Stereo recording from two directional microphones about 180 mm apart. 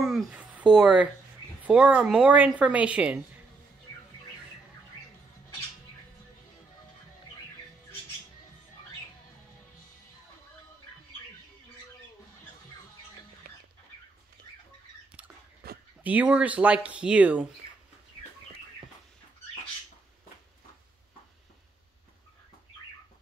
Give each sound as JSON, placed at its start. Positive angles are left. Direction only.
{"t": 0.0, "sound": "a sound", "side_deg": -5}
{"t": 1.6, "sound": "a woman's voice", "side_deg": -5}
{"t": 13.4, "sound": "bird", "side_deg": -60}
{"t": 15.6, "sound": "dog", "side_deg": -60}
{"t": 16.0, "sound": "a woman's voice", "side_deg": -10}